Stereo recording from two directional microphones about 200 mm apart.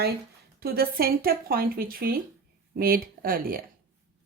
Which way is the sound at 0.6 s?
50° right (ahead or behind).